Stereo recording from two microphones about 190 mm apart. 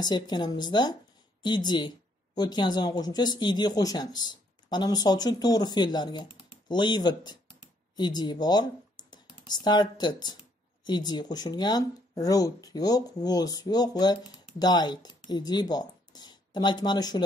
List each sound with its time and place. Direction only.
0.0 s speech: 25° left (ahead or behind)